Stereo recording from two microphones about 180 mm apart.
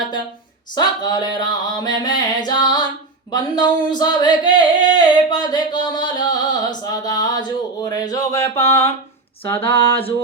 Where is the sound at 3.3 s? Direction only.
25° left (ahead or behind).